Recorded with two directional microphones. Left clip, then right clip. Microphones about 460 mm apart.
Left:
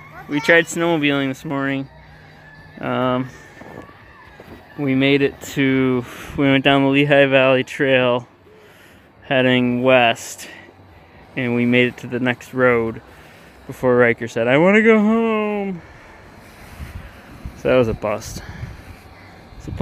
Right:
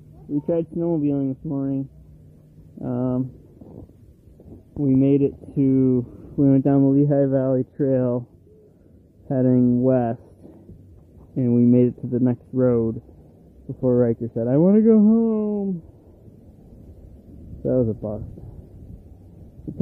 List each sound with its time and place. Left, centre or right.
0.5 s speech: centre
4.8 s speech: centre
9.3 s speech: centre
11.3 s speech: centre
17.6 s speech: centre